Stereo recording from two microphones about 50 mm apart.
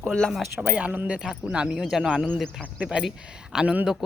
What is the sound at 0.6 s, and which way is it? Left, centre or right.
Speech, right.